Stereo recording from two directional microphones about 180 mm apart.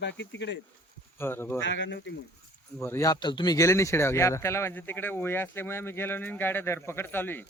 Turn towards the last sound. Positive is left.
turn(degrees=10)  # may be behind; listen again after turning